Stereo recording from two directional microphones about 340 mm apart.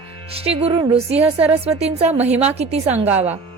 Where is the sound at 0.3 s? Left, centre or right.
Centre.